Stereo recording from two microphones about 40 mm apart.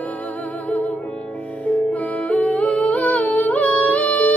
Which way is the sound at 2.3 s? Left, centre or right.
Left.